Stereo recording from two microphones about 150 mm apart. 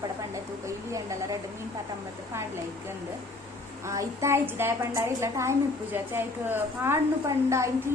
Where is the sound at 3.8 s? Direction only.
20° right (ahead or behind).